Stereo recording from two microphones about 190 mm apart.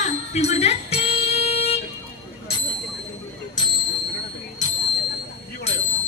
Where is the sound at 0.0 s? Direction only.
35° left (ahead or behind).